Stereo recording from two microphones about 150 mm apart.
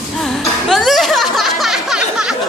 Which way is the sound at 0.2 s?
Centre (ahead or behind).